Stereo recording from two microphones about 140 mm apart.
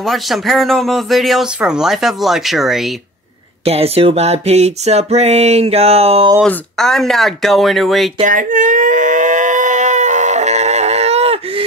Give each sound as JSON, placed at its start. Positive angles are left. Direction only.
{"t": 0.0, "sound": "speech", "side_deg": 0}
{"t": 3.6, "sound": "music", "side_deg": -45}
{"t": 6.4, "sound": "speech", "side_deg": 5}
{"t": 8.2, "sound": "a sound", "side_deg": -70}